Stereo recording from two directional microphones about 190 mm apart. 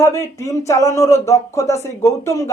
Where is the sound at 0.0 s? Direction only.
15° left (ahead or behind).